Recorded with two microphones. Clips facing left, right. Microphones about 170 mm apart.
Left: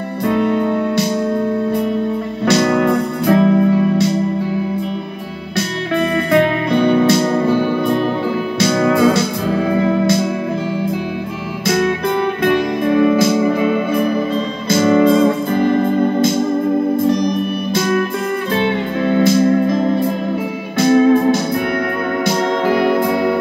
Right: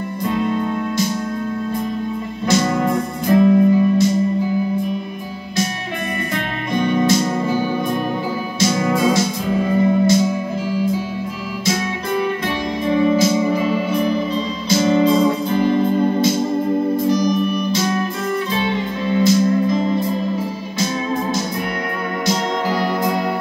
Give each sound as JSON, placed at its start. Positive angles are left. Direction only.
{"t": 0.2, "sound": "music", "side_deg": 65}
{"t": 2.4, "sound": "music", "side_deg": 70}
{"t": 6.7, "sound": "music", "side_deg": 65}